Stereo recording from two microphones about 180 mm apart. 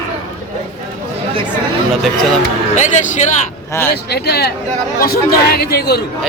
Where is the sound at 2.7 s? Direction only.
40° left (ahead or behind).